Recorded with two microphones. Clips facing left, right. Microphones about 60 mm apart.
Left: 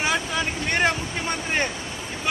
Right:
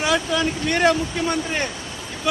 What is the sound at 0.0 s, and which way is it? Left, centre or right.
Speech, left.